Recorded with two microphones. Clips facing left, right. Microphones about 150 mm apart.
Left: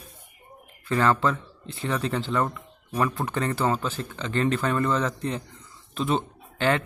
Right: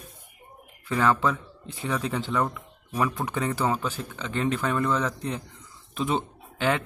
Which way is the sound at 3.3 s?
10° right (ahead or behind).